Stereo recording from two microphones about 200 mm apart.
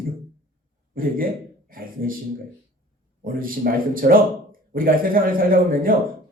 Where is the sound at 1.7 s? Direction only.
45° right (ahead or behind).